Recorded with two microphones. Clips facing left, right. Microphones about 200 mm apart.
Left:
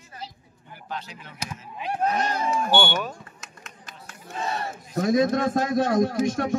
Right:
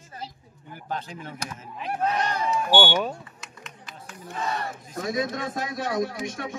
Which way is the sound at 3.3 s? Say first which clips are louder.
Right 1 dB; 45° left (ahead or behind).